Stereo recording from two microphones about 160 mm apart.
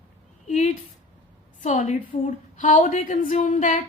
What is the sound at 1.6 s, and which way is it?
Speech, 50° left (ahead or behind).